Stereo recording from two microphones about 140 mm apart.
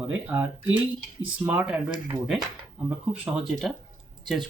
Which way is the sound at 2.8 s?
10° right (ahead or behind).